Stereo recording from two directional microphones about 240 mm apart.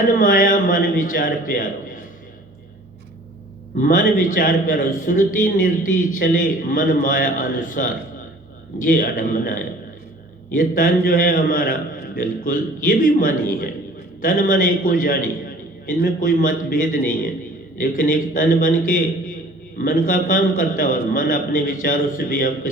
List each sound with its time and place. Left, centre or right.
0.1 s a man's voice: left
3.8 s a man's voice: left